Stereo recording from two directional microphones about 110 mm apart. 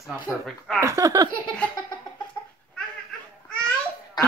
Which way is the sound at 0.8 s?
30° right (ahead or behind).